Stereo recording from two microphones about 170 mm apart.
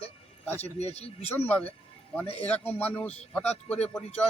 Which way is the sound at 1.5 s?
10° left (ahead or behind).